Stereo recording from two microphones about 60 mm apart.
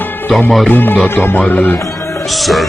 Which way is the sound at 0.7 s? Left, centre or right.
Left.